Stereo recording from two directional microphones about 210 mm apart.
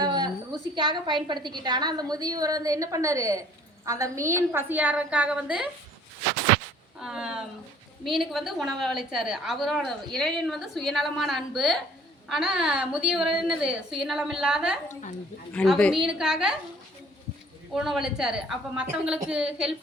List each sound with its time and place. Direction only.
0.0 s a sound: 20° right (ahead or behind)
0.8 s a woman's voice: 20° right (ahead or behind); by 5.7 s 5° right (ahead or behind)
7.0 s speech: 5° right (ahead or behind)
17.7 s speech: centre (ahead or behind)